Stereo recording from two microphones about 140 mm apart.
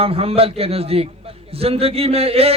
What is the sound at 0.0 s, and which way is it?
A man's voice, 45° right (ahead or behind).